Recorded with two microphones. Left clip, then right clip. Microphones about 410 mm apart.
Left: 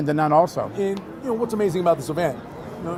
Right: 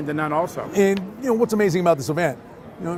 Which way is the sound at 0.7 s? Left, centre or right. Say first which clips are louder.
Right 6 dB; right.